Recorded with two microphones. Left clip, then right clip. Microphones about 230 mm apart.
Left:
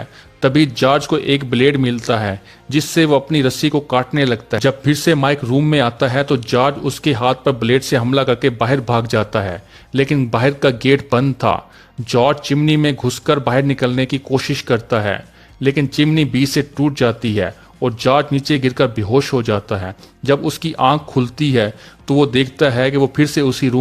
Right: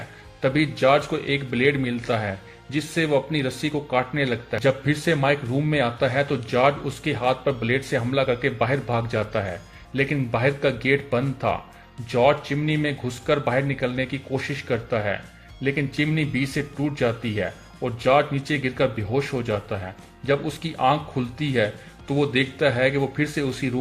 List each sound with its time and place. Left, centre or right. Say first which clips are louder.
0.4 s a man's voice: left 6 dB; left